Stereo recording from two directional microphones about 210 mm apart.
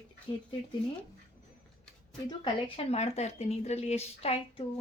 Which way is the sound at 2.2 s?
25° left (ahead or behind).